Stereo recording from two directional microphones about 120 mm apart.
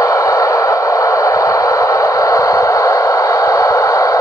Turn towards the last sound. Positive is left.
turn(degrees=30)  # may be behind; listen again after turning